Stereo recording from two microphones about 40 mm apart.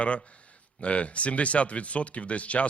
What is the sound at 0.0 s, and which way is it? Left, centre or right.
Speech, left.